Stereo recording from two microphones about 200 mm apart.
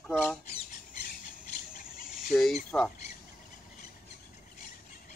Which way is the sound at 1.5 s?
45° left (ahead or behind).